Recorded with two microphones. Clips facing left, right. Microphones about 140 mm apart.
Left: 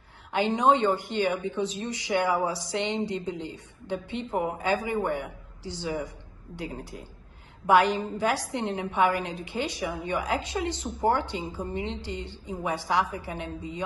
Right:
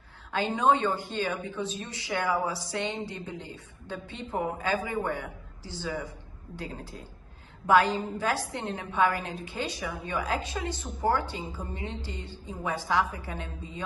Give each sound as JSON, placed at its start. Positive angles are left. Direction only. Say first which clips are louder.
{"t": 0.6, "sound": "speech", "louder": "left 2 dB", "side_deg": 20}